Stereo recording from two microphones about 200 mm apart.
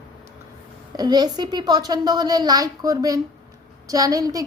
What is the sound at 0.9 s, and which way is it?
A woman's voice, 20° right (ahead or behind).